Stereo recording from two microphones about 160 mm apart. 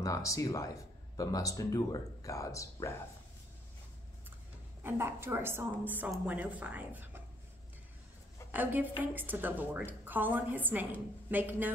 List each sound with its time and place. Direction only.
0.0 s speech: 20° left (ahead or behind)
4.8 s a woman's voice: 15° right (ahead or behind)
8.5 s a woman's voice: 10° right (ahead or behind)